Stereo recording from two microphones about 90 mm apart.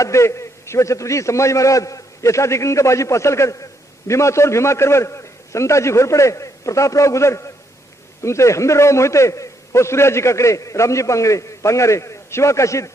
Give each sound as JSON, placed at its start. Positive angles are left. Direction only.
{"t": 0.0, "sound": "a man's voice", "side_deg": 35}